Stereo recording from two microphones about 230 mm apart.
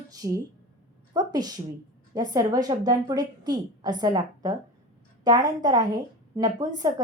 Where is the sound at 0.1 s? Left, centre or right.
Centre.